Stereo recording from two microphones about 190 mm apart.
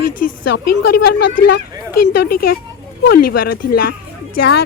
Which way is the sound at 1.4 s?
55° left (ahead or behind).